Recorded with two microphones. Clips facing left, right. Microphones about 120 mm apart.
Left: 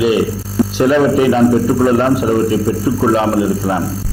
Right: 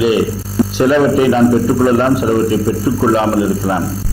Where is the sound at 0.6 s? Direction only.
Centre (ahead or behind).